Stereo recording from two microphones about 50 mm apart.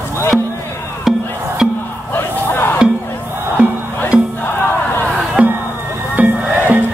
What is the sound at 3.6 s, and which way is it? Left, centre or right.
Music, right.